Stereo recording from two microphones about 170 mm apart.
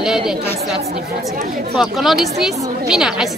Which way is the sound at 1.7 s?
Centre (ahead or behind).